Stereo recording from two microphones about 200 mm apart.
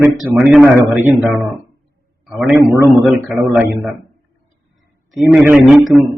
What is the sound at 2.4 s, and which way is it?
A man's voice, 10° right (ahead or behind).